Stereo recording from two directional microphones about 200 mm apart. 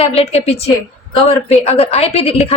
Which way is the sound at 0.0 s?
30° left (ahead or behind).